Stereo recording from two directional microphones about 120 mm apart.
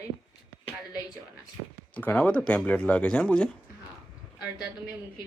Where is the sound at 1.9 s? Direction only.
15° left (ahead or behind).